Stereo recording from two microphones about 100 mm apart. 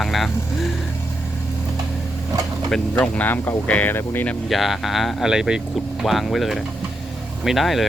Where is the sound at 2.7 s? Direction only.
10° left (ahead or behind).